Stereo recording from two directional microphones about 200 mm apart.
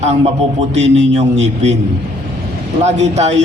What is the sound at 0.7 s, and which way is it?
A man's voice, 35° right (ahead or behind).